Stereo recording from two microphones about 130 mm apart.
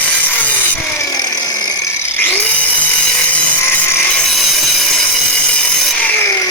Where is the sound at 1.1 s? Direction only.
30° left (ahead or behind).